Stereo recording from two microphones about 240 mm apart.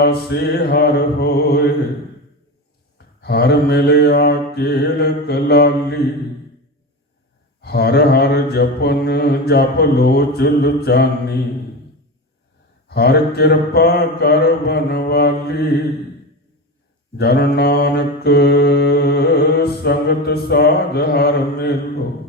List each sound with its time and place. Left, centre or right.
0.0 s mantra: left
3.2 s mantra: left
7.6 s mantra: left
12.9 s mantra: left
17.2 s mantra: left